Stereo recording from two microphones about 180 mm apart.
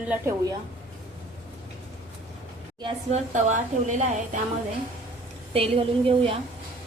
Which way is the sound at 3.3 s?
45° right (ahead or behind).